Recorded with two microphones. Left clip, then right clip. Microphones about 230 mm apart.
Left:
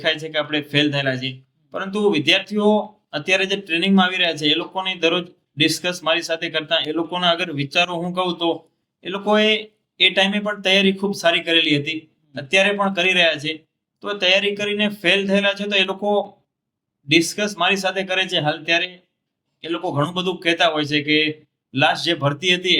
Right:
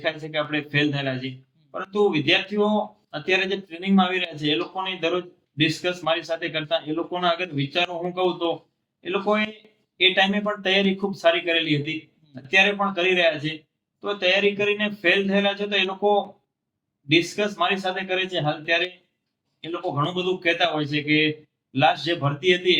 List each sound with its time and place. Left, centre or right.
0.0 s speech: left